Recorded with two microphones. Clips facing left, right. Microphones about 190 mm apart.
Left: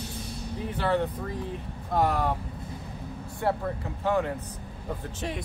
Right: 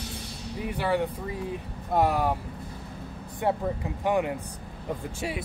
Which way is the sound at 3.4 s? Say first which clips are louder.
Right 1 dB; 15° right (ahead or behind).